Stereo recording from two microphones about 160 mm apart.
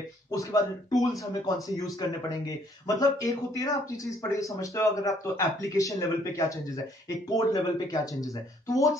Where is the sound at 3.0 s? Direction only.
20° left (ahead or behind).